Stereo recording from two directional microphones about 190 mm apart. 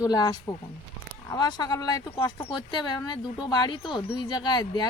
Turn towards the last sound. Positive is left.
turn(degrees=20)  # may be behind; listen again after turning